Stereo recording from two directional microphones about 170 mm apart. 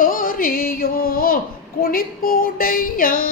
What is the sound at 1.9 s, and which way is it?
Music, 55° left (ahead or behind).